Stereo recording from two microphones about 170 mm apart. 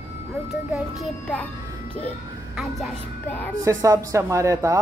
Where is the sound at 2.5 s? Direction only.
Centre (ahead or behind).